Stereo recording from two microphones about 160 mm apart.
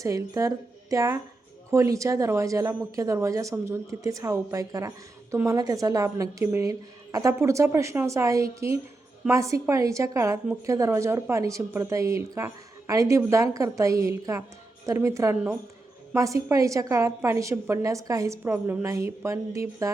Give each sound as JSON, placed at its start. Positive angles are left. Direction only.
{"t": 0.0, "sound": "a woman's voice", "side_deg": -20}